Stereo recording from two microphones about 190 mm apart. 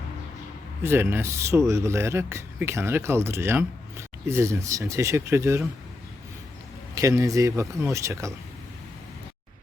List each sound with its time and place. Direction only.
0.8 s speech: 10° right (ahead or behind)
6.9 s speech: 15° right (ahead or behind)